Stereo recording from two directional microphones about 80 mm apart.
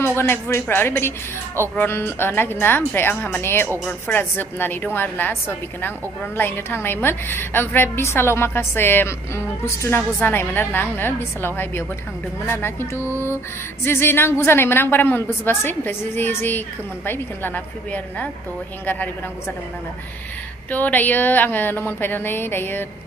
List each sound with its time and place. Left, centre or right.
0.0 s a woman's voice: left
20.7 s a woman's voice: left